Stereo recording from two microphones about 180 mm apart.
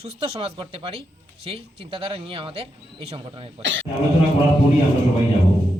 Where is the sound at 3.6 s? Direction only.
90° right.